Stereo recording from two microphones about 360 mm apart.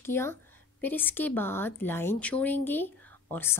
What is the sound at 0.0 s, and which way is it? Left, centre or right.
A woman's voice, centre.